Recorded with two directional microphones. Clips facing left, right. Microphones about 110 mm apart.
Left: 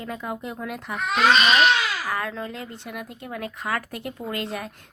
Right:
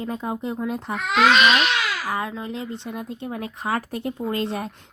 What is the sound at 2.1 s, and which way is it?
Speech, 20° right (ahead or behind).